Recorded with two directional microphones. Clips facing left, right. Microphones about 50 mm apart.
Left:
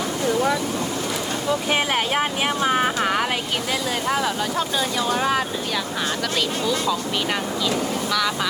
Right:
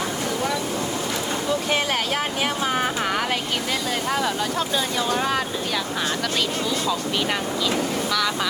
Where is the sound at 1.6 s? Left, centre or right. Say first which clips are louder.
Left 2 dB; centre.